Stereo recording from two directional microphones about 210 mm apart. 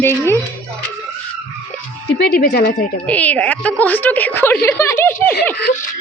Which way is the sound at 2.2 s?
45° left (ahead or behind).